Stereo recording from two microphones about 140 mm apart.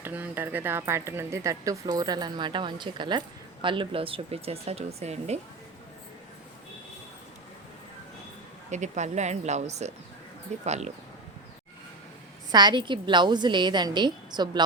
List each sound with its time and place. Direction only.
0.0 s speech: 10° right (ahead or behind); by 5.4 s 50° right (ahead or behind)
8.7 s speech: 55° right (ahead or behind)
12.5 s speech: 30° right (ahead or behind)